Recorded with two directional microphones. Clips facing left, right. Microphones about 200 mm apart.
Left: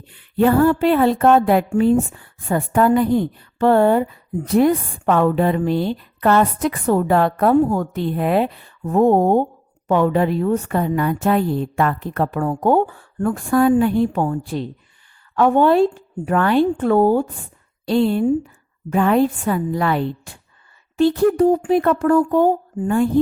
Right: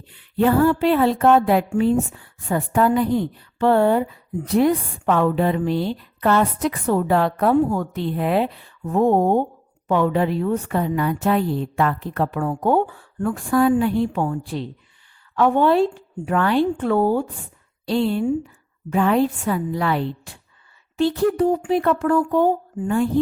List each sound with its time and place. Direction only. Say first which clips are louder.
0.1 s speech: left 2 dB; 55° left (ahead or behind)